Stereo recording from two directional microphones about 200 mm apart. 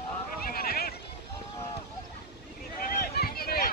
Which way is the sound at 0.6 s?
50° left (ahead or behind).